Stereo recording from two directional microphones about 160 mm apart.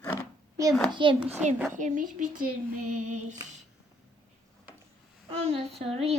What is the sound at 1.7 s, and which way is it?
A woman's voice, 55° right (ahead or behind).